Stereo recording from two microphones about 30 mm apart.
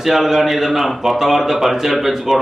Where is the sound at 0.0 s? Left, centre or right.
Centre.